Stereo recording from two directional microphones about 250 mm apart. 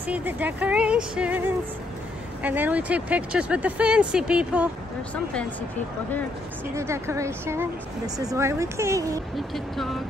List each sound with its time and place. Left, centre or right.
0.0 s speech: centre
6.7 s speech: centre
9.5 s speech: centre